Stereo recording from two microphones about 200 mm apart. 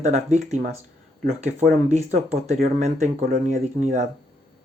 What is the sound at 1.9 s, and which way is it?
Speech, 35° right (ahead or behind).